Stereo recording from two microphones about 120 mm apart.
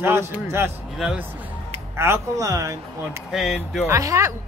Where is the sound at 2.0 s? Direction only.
25° right (ahead or behind).